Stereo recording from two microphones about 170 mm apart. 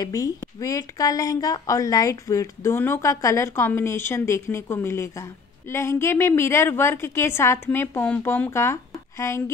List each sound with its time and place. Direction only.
0.0 s a woman's voice: 20° left (ahead or behind)